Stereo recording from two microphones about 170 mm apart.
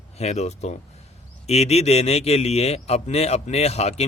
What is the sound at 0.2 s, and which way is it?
A man's voice, 40° left (ahead or behind).